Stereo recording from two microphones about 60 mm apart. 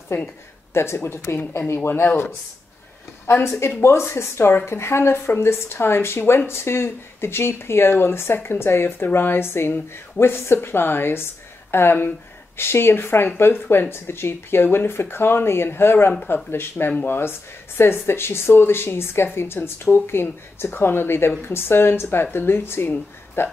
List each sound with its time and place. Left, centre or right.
0.1 s speech: left
3.4 s speech: left